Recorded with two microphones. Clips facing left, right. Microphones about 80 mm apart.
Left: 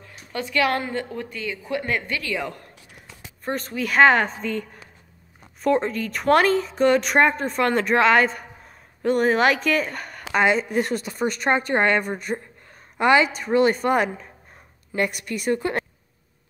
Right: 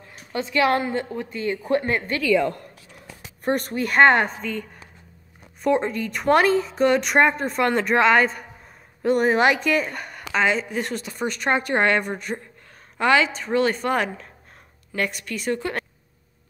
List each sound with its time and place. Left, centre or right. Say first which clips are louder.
0.3 s a woman's voice: right 2 dB; right
1.4 s speech: right 7 dB; right
1.8 s speech: right 2 dB; right
3.4 s speech: right 4 dB; right
3.9 s a woman's voice: even; centre